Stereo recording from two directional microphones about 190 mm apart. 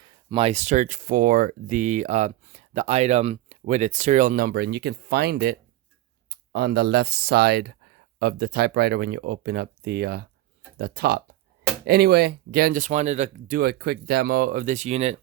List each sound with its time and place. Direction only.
0.0 s speech: 25° right (ahead or behind)